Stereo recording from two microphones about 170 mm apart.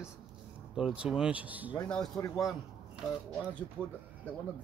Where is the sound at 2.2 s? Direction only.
10° left (ahead or behind).